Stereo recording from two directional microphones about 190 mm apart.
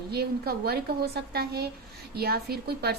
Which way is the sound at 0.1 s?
55° right (ahead or behind).